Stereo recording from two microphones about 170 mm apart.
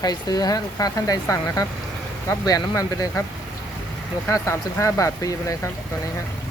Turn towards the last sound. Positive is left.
turn(degrees=20)  # may be behind; listen again after turning